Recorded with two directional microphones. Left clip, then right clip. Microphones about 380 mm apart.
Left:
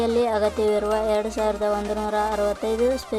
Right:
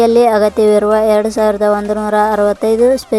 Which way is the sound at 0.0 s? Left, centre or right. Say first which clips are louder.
Right 12 dB; centre.